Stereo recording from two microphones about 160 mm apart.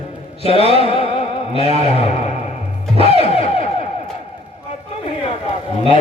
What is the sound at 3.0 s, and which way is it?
Music, 40° left (ahead or behind).